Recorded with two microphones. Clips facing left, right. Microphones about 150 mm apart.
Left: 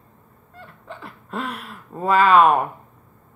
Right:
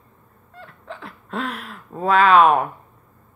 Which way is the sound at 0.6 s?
Centre (ahead or behind).